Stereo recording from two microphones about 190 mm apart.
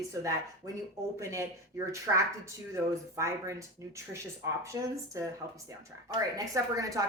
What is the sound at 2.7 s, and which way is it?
Speech, 15° right (ahead or behind).